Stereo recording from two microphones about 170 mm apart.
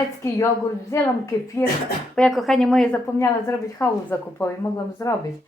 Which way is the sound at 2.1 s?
Centre (ahead or behind).